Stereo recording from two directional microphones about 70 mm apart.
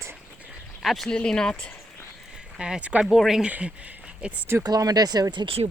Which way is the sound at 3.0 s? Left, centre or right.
Centre.